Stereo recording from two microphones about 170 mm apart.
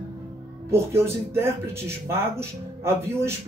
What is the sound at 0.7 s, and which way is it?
Speech, 15° right (ahead or behind).